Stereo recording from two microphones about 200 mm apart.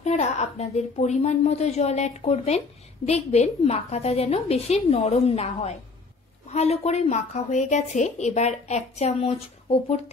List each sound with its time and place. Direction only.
0.0 s a woman's voice: 35° left (ahead or behind)